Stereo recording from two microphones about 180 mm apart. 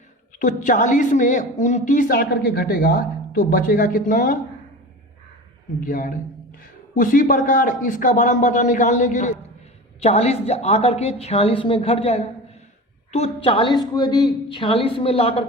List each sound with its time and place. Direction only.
0.3 s a woman's voice: 45° left (ahead or behind)
5.8 s a woman's voice: 50° left (ahead or behind); by 15.4 s 30° left (ahead or behind)